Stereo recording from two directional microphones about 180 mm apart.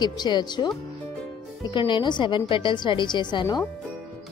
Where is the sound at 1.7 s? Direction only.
25° left (ahead or behind).